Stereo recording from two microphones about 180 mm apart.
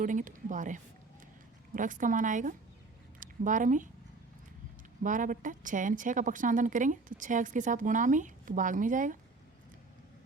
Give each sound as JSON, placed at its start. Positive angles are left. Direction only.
{"t": 0.0, "sound": "a woman's voice", "side_deg": -45}
{"t": 5.0, "sound": "a woman's voice", "side_deg": -45}